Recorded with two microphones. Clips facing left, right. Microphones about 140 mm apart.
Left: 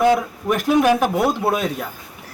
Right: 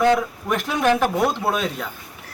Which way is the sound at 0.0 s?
10° left (ahead or behind).